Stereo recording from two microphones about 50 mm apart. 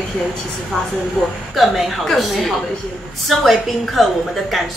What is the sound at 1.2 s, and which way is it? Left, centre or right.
A woman's voice, centre.